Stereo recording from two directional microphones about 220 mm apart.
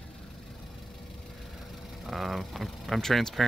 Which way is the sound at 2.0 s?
Centre (ahead or behind).